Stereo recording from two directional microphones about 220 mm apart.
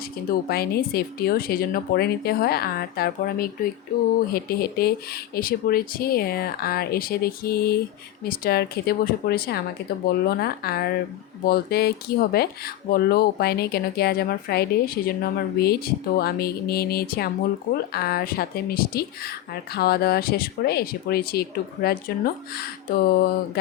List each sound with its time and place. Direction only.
0.3 s speech: 45° left (ahead or behind)